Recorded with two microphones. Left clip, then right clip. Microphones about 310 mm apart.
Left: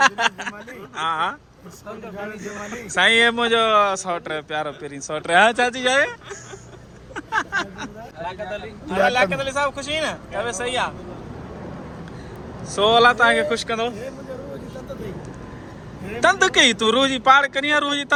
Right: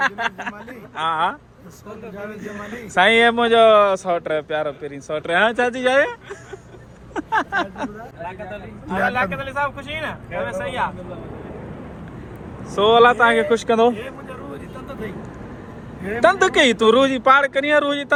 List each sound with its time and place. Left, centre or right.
0.0 s a man's voice: centre
2.4 s a man's voice: centre
7.1 s a sound: centre
8.2 s speech: left
8.9 s a man's voice: centre
12.7 s a man's voice: centre
16.0 s a man's voice: centre